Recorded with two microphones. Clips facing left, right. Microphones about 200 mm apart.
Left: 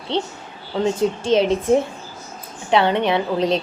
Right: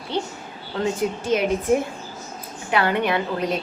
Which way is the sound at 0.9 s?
30° left (ahead or behind).